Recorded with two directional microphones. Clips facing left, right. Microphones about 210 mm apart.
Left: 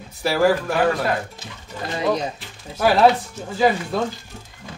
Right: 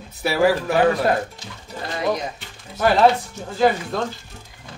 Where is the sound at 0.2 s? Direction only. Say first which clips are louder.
Even; centre (ahead or behind).